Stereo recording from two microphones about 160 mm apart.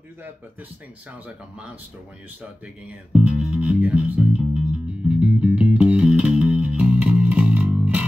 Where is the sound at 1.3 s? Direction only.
5° right (ahead or behind).